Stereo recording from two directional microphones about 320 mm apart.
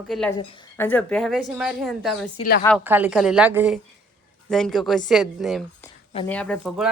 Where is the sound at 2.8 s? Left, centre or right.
Centre.